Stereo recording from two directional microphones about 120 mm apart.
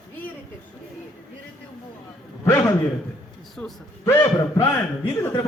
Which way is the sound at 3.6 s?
10° left (ahead or behind).